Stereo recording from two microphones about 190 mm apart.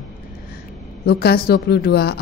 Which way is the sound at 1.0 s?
55° left (ahead or behind).